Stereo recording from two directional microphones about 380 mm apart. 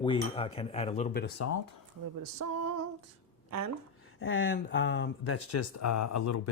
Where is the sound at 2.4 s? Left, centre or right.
Right.